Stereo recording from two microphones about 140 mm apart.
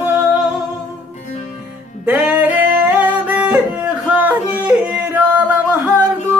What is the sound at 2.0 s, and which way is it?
Music, 10° right (ahead or behind).